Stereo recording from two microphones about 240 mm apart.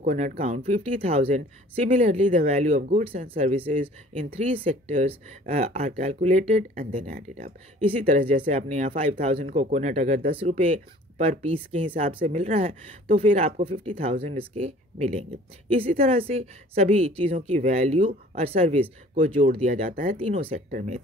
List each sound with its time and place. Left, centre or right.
0.0 s speech: right